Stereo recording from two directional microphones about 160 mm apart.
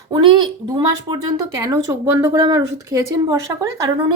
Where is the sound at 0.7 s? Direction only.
25° right (ahead or behind).